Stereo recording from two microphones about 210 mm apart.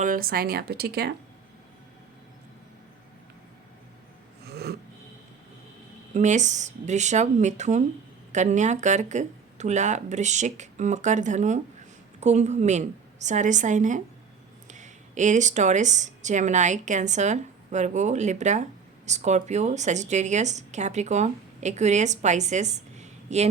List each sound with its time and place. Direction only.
0.0 s speech: 40° right (ahead or behind)
4.4 s snort: 50° right (ahead or behind)
6.1 s a woman's voice: 35° right (ahead or behind)